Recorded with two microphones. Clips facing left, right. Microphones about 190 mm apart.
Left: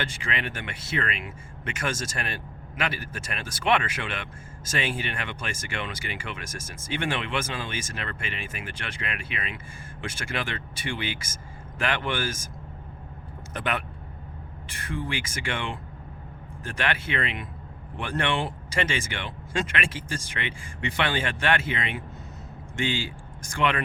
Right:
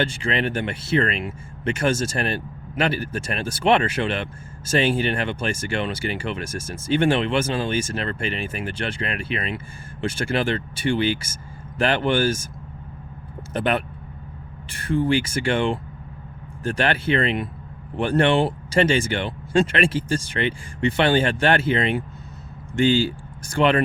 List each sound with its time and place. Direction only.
0.0 s speech: 30° right (ahead or behind)
13.5 s speech: 30° right (ahead or behind)